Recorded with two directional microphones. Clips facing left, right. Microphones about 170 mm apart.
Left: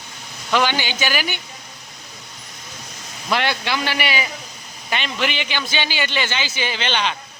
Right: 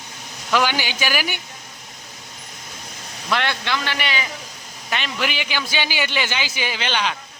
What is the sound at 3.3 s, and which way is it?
Speech, 5° left (ahead or behind).